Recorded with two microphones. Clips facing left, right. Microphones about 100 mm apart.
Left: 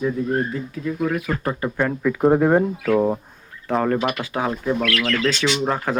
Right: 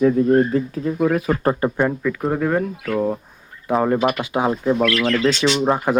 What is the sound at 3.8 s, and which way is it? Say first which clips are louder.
Speech: right 3 dB; 10° right (ahead or behind).